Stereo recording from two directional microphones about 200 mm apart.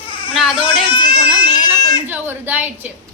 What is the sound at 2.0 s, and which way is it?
Speech, 10° right (ahead or behind).